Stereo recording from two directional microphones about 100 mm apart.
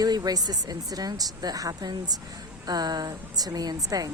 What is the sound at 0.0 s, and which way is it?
Speech, 40° right (ahead or behind).